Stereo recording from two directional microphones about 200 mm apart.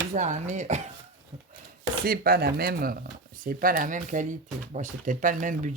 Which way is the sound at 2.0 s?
50° right (ahead or behind).